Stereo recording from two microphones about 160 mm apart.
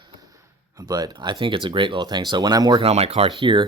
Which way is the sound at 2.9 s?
40° right (ahead or behind).